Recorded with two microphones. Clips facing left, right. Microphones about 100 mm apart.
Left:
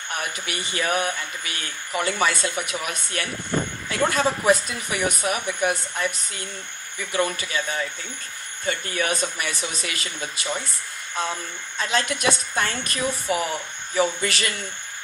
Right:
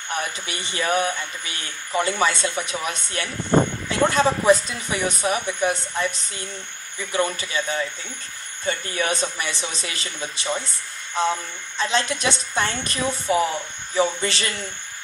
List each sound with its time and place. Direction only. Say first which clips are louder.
0.1 s speech: right 2 dB; 30° right (ahead or behind)
8.6 s speech: right 1 dB; 30° right (ahead or behind)
11.8 s speech: right 1 dB; 30° right (ahead or behind)